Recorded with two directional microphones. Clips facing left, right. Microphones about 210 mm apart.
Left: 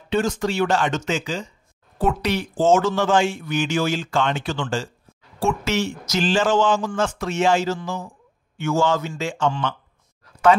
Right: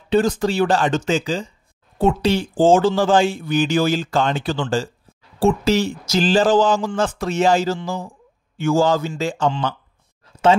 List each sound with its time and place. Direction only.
0.1 s a man's voice: 35° right (ahead or behind)